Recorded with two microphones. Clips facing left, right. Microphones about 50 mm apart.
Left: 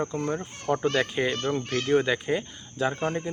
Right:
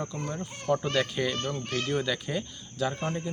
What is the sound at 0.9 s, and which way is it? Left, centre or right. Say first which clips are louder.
Speech: left 2 dB; left.